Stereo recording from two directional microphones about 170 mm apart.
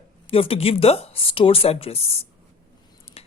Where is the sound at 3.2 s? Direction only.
35° left (ahead or behind).